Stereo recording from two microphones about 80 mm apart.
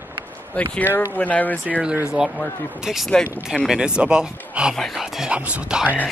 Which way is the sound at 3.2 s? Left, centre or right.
Centre.